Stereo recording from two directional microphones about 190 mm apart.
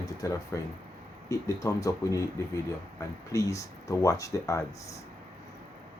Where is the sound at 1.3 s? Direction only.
15° left (ahead or behind).